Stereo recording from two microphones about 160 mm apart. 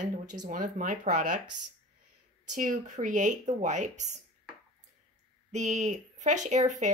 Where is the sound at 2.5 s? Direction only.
50° right (ahead or behind).